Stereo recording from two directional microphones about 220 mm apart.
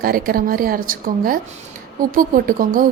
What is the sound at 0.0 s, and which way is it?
A woman's voice, 40° right (ahead or behind).